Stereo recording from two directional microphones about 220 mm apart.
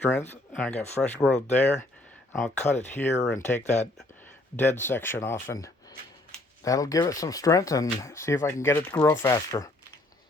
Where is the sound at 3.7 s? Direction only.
10° left (ahead or behind).